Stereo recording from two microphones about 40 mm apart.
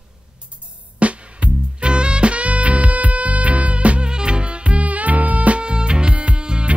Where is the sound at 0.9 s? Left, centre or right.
Right.